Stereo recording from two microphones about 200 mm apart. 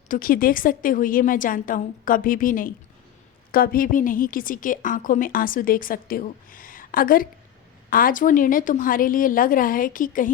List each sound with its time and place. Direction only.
0.1 s a woman's voice: 45° left (ahead or behind)